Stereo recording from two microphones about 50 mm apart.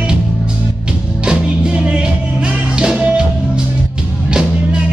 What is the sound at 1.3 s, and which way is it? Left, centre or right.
Music, centre.